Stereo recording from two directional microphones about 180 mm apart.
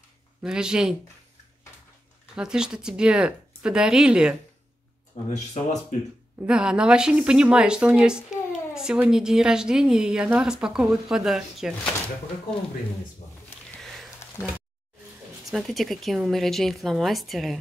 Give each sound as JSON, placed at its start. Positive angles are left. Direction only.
{"t": 0.4, "sound": "a woman's voice", "side_deg": -5}
{"t": 2.3, "sound": "a woman's voice", "side_deg": -5}
{"t": 5.3, "sound": "speech", "side_deg": 40}
{"t": 6.4, "sound": "a woman's voice", "side_deg": -5}
{"t": 13.7, "sound": "sniff", "side_deg": 0}
{"t": 15.5, "sound": "a woman's voice", "side_deg": 0}